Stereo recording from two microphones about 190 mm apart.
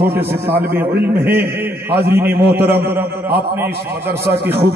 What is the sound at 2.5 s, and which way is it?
Speech, 10° right (ahead or behind).